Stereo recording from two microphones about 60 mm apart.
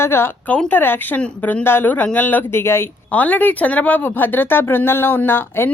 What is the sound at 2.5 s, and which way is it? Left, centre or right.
Speech, left.